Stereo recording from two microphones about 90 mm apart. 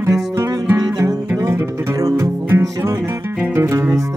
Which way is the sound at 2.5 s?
30° right (ahead or behind).